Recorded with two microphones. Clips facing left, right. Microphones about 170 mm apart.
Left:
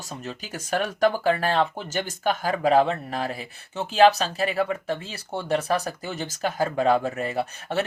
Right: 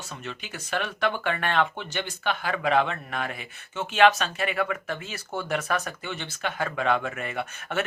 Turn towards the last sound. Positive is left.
turn(degrees=30)  # may be behind; listen again after turning